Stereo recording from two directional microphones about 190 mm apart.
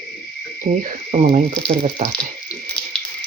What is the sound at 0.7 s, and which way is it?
Speech, 35° right (ahead or behind).